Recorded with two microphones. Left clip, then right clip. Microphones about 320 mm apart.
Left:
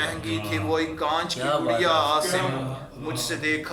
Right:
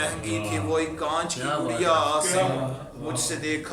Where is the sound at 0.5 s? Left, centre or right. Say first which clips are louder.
Left 1 dB; centre.